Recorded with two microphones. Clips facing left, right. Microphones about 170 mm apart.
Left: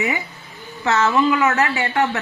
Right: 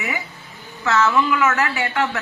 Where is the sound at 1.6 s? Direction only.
20° left (ahead or behind).